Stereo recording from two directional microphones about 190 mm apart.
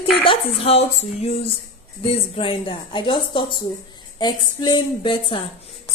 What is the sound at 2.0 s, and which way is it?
A woman's voice, 30° left (ahead or behind).